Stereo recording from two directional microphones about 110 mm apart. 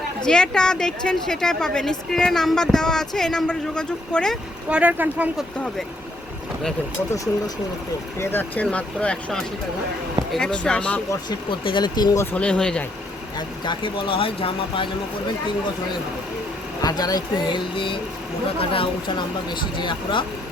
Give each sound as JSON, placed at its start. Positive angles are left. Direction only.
{"t": 0.3, "sound": "a woman's voice", "side_deg": 5}
{"t": 4.7, "sound": "speech", "side_deg": -15}
{"t": 8.2, "sound": "speech", "side_deg": 20}
{"t": 11.3, "sound": "speech", "side_deg": 45}
{"t": 12.1, "sound": "speech", "side_deg": 25}
{"t": 12.4, "sound": "speech", "side_deg": 10}
{"t": 13.7, "sound": "speech", "side_deg": 50}
{"t": 16.8, "sound": "speech", "side_deg": 35}